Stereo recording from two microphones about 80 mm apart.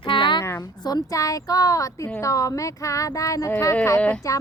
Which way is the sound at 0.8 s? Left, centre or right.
Left.